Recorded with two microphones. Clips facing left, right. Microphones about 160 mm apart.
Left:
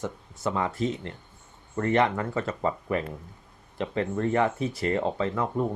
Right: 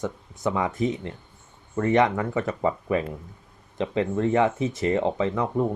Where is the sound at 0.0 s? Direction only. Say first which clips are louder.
Right 3 dB; 15° right (ahead or behind).